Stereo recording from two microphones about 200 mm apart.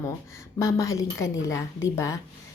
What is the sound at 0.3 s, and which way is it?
A woman's voice, 15° left (ahead or behind).